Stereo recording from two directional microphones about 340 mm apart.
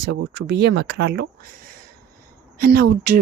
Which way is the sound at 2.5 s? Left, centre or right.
Right.